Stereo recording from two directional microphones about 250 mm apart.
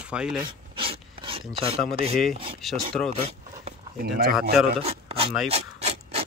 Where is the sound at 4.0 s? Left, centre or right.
Right.